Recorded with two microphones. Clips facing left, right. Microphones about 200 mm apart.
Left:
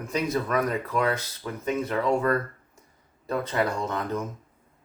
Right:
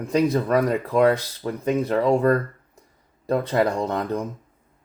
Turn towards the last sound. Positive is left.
turn(degrees=-35)  # may be behind; listen again after turning